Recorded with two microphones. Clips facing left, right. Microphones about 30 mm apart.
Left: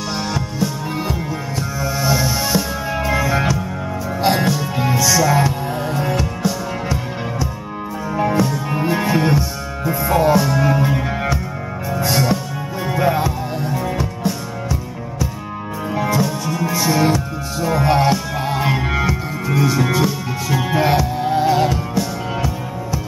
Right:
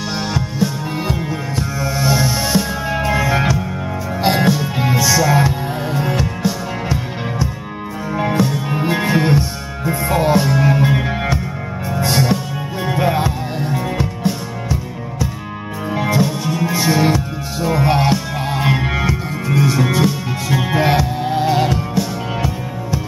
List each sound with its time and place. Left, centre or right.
0.3 s music: centre